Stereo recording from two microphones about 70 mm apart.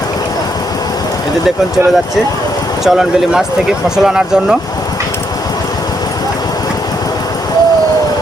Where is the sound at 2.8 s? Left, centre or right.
Centre.